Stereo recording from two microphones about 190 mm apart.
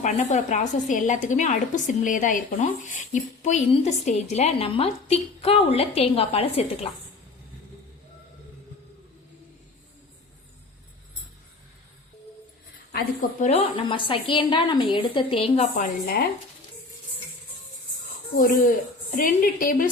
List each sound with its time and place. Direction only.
0.0 s a woman's voice: 35° left (ahead or behind)
12.9 s a woman's voice: 50° left (ahead or behind)
13.5 s a woman's voice: 30° left (ahead or behind)
19.1 s a woman's voice: 45° left (ahead or behind)